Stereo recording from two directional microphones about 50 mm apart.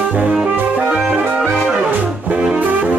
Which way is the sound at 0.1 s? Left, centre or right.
Right.